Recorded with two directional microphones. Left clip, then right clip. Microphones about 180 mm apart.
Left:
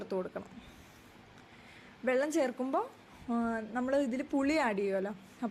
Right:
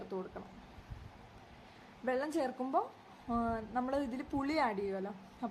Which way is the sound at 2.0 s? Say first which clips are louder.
Left 5 dB; 15° left (ahead or behind).